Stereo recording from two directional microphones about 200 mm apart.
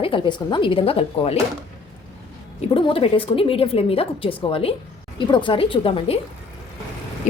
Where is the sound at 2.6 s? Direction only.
30° left (ahead or behind).